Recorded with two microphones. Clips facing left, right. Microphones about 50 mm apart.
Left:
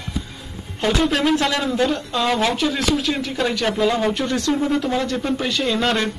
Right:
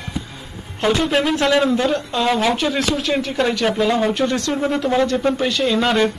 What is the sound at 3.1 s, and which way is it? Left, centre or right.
Speech, centre.